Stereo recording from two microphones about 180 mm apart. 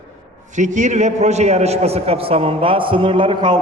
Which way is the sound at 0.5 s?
40° right (ahead or behind).